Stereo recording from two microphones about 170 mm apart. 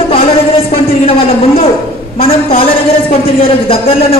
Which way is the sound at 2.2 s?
35° left (ahead or behind).